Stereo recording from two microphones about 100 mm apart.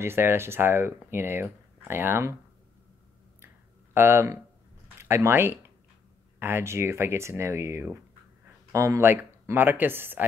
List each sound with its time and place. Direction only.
0.0 s speech: 25° right (ahead or behind)
3.9 s speech: 25° right (ahead or behind)